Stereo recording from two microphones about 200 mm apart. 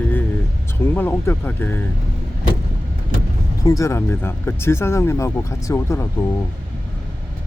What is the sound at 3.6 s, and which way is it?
Speech, 15° left (ahead or behind).